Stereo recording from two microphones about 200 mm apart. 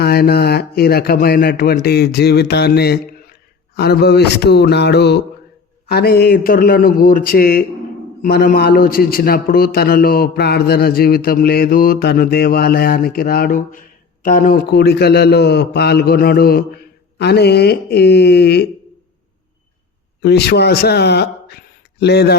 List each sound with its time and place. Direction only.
0.0 s a man's voice: 50° left (ahead or behind)
3.8 s mantra: 55° left (ahead or behind)
5.9 s a man's voice: 50° left (ahead or behind)
20.2 s speech: 55° left (ahead or behind)